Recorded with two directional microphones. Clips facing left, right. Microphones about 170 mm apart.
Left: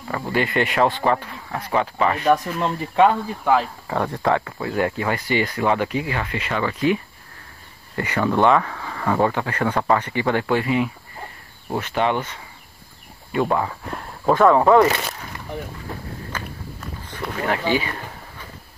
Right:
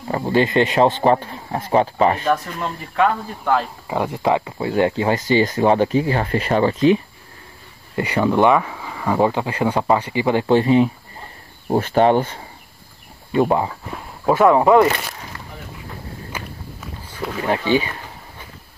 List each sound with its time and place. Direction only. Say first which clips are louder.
0.1 s speech: right 5 dB; 25° right (ahead or behind)
2.3 s speech: left 3 dB; 25° left (ahead or behind)
3.3 s speech: left 1 dB; 5° left (ahead or behind)
3.8 s speech: right 2 dB; 10° right (ahead or behind); by 12.4 s 35° right (ahead or behind)
13.3 s speech: right 4 dB; 25° right (ahead or behind)
13.9 s speech: right 1 dB; 10° right (ahead or behind)
16.3 s walk: even; 10° right (ahead or behind)
17.5 s speech: right 4 dB; 20° right (ahead or behind)